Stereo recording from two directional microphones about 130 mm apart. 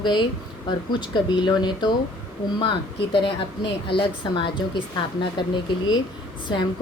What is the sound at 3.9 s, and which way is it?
Speech, 40° left (ahead or behind).